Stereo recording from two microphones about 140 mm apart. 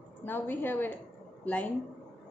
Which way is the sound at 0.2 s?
15° left (ahead or behind).